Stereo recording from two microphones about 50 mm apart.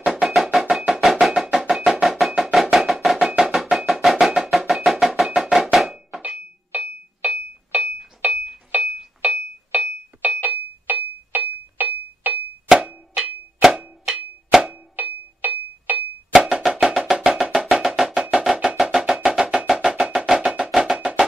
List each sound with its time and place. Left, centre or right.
0.0 s music: centre
6.7 s music: right
12.8 s plop: centre
13.6 s a sound: centre
15.0 s music: right
16.3 s music: centre